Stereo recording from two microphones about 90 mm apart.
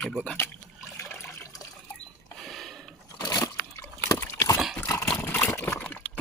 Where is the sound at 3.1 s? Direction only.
45° left (ahead or behind).